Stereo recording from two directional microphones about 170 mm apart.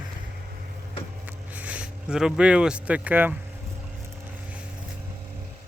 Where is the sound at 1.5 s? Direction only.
10° right (ahead or behind).